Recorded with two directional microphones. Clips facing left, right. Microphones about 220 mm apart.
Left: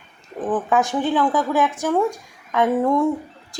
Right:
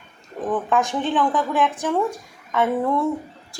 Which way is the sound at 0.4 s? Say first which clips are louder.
Left 1 dB; 5° left (ahead or behind).